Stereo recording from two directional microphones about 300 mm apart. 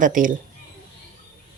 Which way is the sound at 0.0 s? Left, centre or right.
Right.